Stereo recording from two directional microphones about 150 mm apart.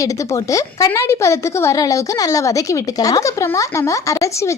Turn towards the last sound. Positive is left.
turn(degrees=20)  # may be behind; listen again after turning